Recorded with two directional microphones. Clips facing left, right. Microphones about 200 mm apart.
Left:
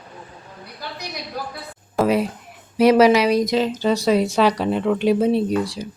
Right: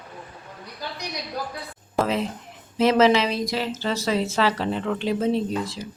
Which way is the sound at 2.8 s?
10° left (ahead or behind).